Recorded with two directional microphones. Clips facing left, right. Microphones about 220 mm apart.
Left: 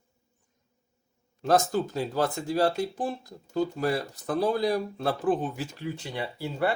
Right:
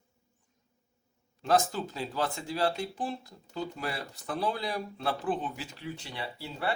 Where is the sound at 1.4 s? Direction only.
45° left (ahead or behind).